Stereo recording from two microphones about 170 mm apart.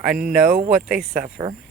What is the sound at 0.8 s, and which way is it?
Speech, 60° right (ahead or behind).